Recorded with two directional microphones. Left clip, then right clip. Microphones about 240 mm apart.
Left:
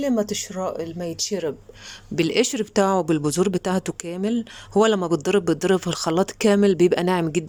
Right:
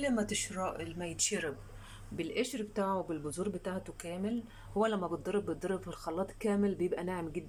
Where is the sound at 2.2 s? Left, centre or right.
Left.